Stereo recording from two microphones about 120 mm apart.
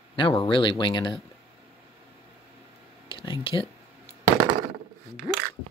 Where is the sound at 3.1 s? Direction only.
50° left (ahead or behind).